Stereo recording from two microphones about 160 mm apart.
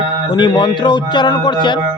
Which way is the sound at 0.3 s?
30° left (ahead or behind).